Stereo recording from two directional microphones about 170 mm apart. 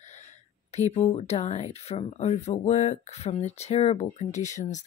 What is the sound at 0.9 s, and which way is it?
Speech, 35° left (ahead or behind).